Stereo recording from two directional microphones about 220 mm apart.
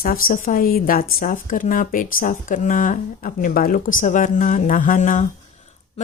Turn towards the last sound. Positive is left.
turn(degrees=30)  # may be behind; listen again after turning